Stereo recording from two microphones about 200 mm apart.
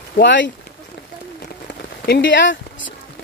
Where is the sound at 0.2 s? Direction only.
65° left (ahead or behind).